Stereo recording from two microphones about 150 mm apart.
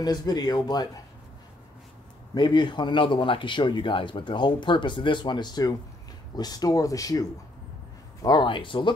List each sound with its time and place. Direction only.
0.0 s speech: 25° left (ahead or behind)
2.3 s speech: 30° left (ahead or behind)